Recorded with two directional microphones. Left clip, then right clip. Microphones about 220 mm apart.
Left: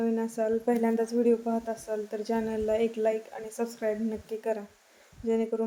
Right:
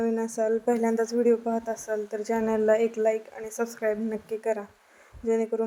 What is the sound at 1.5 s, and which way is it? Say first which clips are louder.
Speech: right 3 dB; 20° right (ahead or behind).